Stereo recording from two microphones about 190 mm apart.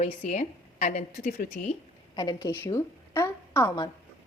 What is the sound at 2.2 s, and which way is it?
A woman's voice, 20° left (ahead or behind).